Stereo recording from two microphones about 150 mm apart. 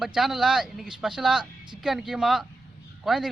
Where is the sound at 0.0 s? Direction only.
Centre (ahead or behind).